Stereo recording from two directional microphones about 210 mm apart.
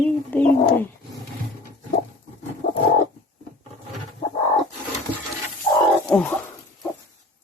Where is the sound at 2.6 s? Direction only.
40° left (ahead or behind).